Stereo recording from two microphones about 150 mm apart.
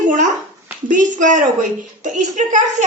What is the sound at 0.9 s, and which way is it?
A woman's voice, 60° right (ahead or behind).